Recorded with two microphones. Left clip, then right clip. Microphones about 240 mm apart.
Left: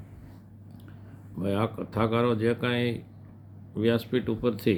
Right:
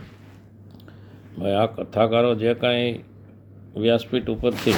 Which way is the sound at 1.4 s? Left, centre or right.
Centre.